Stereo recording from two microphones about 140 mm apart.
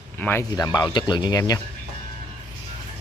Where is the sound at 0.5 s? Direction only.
30° left (ahead or behind).